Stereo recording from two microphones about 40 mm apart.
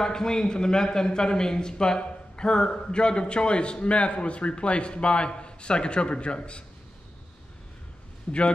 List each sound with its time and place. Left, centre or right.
0.0 s a man's voice: centre
8.3 s a man's voice: left